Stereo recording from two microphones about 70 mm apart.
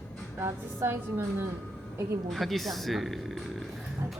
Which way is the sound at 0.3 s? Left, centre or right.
Right.